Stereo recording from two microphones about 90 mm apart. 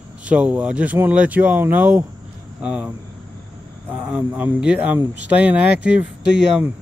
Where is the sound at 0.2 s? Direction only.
15° right (ahead or behind).